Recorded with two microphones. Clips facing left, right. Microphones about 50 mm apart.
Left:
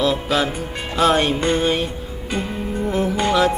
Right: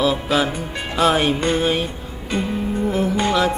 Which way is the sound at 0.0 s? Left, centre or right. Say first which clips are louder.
Right 1 dB; centre.